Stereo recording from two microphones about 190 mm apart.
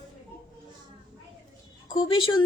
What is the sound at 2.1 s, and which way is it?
Speech, 25° left (ahead or behind).